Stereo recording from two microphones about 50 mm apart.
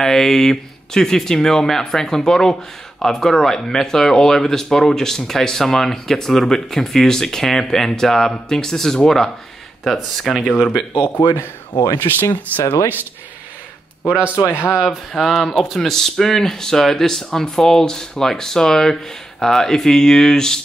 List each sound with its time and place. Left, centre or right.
0.0 s speech: centre
10.9 s speech: left
14.3 s speech: left
14.7 s speech: centre
15.1 s speech: centre